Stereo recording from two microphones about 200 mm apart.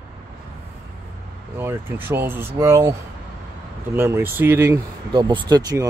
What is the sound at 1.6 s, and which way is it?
Speech, 10° right (ahead or behind).